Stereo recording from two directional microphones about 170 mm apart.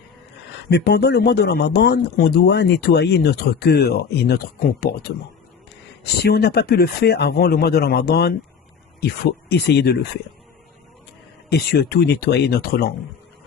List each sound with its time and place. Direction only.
0.7 s speech: 75° left (ahead or behind)
6.2 s speech: 70° left (ahead or behind)
11.4 s speech: 70° left (ahead or behind)